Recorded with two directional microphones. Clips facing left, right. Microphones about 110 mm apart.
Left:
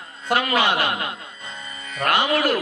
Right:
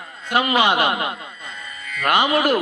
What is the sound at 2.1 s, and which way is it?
Speech, 15° right (ahead or behind).